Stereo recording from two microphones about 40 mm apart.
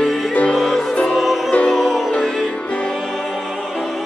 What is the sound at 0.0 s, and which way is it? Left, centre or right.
Music, centre.